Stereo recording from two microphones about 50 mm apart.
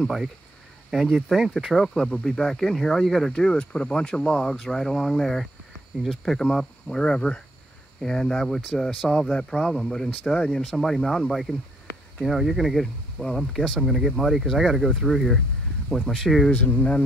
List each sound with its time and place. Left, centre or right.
1.1 s speech: centre
2.0 s speech: centre
10.8 s speech: centre
16.5 s speech: left